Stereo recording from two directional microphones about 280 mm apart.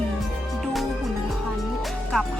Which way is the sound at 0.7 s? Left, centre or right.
Centre.